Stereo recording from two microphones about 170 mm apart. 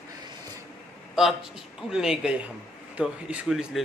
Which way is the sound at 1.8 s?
5° right (ahead or behind).